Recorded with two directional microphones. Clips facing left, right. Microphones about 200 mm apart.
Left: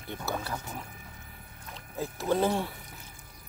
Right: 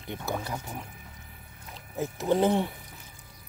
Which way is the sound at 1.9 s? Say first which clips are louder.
Right 3 dB; 20° right (ahead or behind).